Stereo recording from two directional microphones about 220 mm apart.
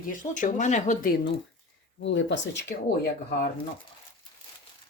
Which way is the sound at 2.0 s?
55° left (ahead or behind).